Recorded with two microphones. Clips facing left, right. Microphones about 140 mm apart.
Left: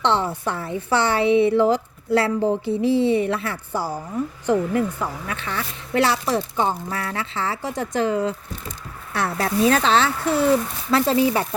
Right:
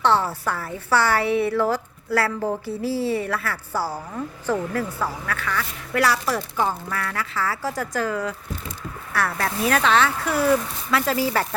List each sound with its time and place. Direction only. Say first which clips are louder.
0.0 s a woman's voice: right 1 dB; 20° left (ahead or behind)